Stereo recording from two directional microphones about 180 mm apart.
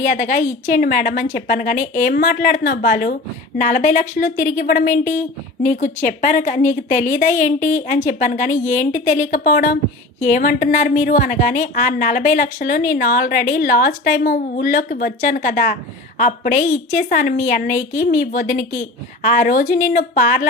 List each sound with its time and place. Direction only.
0.0 s a woman's voice: 45° left (ahead or behind)